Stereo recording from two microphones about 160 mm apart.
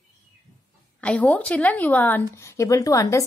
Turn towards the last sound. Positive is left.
turn(degrees=20)  # may be behind; listen again after turning